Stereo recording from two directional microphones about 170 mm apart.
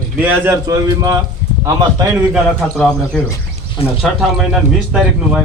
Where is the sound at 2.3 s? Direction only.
Centre (ahead or behind).